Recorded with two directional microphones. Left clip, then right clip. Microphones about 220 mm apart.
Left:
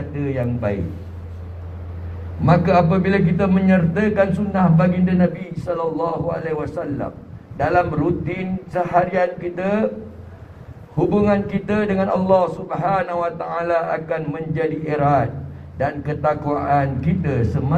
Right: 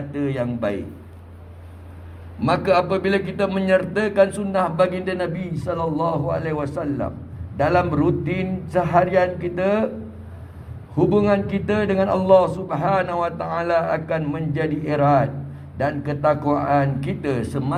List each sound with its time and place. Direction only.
0.1 s a man's voice: 45° right (ahead or behind)
2.4 s a man's voice: 40° right (ahead or behind)
10.9 s a man's voice: 40° right (ahead or behind)